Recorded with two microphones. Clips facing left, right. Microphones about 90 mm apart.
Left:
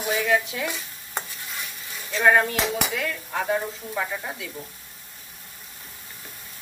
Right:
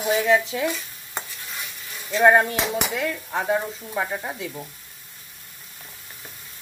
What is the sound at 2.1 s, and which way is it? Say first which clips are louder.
Speech: right 3 dB; 20° right (ahead or behind).